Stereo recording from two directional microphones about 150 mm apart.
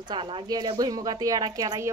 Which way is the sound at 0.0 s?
30° right (ahead or behind).